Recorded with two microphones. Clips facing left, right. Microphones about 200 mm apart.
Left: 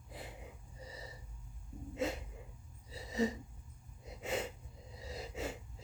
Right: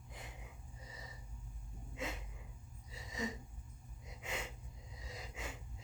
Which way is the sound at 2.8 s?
35° left (ahead or behind).